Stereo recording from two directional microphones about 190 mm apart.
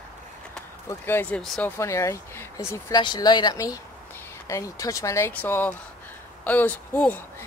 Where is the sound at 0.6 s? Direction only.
10° left (ahead or behind).